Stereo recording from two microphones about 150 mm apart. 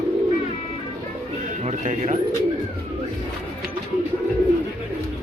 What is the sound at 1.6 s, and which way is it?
Bird, 50° right (ahead or behind).